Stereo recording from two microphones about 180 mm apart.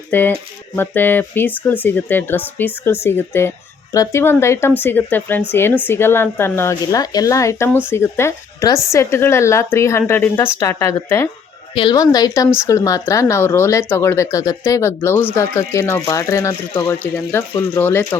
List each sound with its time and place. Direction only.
0.1 s speech: 10° left (ahead or behind)
11.7 s a woman's voice: 25° left (ahead or behind); by 18.2 s 10° left (ahead or behind)